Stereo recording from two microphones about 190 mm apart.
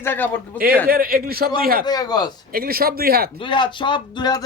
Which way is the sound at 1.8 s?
20° left (ahead or behind).